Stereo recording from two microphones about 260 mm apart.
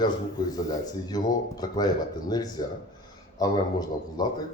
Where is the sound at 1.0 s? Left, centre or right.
Centre.